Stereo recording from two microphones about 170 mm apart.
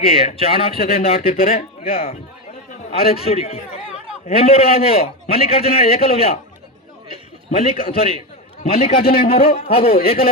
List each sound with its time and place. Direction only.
0.0 s a man's voice: 35° left (ahead or behind)
9.0 s speech: 60° left (ahead or behind)
9.6 s a man's voice: 35° left (ahead or behind)